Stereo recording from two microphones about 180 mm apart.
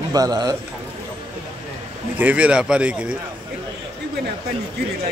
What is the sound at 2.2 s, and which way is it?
Speech, 5° right (ahead or behind).